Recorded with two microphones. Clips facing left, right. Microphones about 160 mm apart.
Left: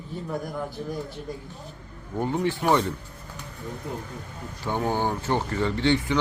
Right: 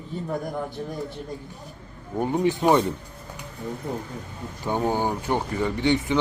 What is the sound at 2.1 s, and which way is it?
Speech, 15° right (ahead or behind).